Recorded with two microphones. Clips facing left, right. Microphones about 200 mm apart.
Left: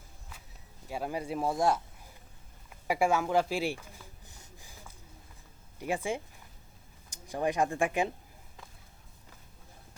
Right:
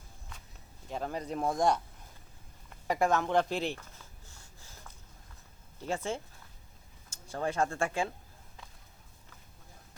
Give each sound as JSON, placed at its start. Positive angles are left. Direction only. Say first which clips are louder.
{"t": 0.3, "sound": "walk", "louder": "even", "side_deg": 5}
{"t": 0.9, "sound": "speech", "louder": "left 1 dB", "side_deg": 10}
{"t": 2.6, "sound": "a sound", "louder": "left 1 dB", "side_deg": 10}
{"t": 5.8, "sound": "speech", "louder": "left 2 dB", "side_deg": 15}